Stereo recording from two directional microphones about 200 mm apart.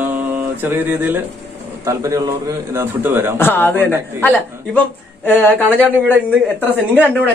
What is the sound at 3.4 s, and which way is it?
A man's voice, 10° left (ahead or behind).